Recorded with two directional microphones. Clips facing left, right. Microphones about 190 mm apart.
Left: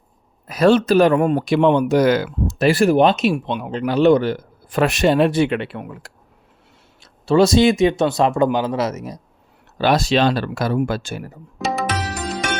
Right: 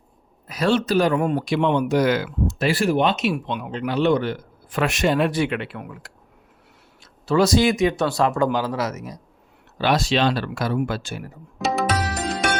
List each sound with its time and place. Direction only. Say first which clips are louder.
0.4 s speech: left 6 dB; 50° left (ahead or behind)
3.3 s a man's voice: left 4 dB; 30° left (ahead or behind)
9.7 s speech: left 4 dB; 40° left (ahead or behind)
11.6 s music: even; centre (ahead or behind)